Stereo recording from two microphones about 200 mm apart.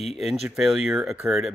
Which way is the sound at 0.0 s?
Centre (ahead or behind).